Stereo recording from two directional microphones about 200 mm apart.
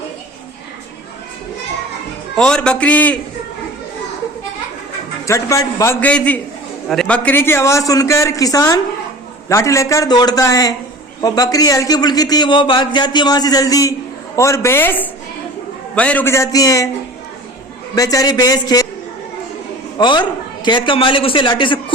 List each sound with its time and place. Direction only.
2.3 s a man's voice: 5° left (ahead or behind)
5.2 s a man's voice: 15° left (ahead or behind)
17.9 s a man's voice: 15° left (ahead or behind)
20.0 s a man's voice: 20° left (ahead or behind)